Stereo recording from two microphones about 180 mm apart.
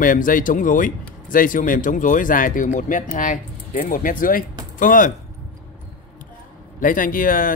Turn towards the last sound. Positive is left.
turn(degrees=50)  # may be behind; listen again after turning